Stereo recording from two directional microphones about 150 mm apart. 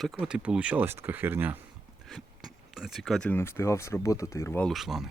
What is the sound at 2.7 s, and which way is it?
Speech, centre (ahead or behind).